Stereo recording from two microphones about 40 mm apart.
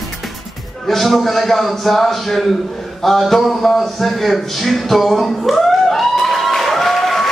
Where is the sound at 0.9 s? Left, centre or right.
Centre.